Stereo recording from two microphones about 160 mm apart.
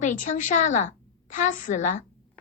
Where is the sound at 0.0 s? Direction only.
50° left (ahead or behind).